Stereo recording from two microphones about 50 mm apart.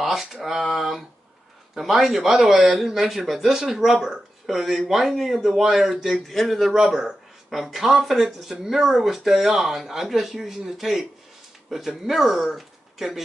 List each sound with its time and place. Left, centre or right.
0.0 s speech: centre